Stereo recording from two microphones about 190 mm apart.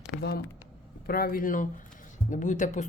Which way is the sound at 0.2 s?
55° left (ahead or behind).